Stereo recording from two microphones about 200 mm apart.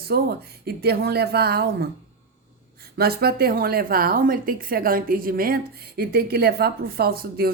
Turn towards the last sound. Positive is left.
turn(degrees=-50)  # may be behind; listen again after turning